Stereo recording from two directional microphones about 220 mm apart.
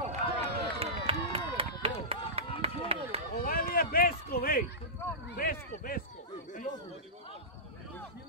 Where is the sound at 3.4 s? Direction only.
40° left (ahead or behind).